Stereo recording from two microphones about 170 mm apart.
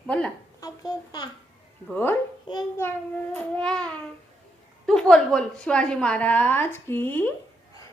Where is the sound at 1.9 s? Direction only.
10° left (ahead or behind).